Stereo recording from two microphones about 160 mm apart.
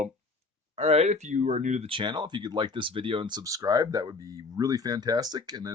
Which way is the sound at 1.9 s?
30° right (ahead or behind).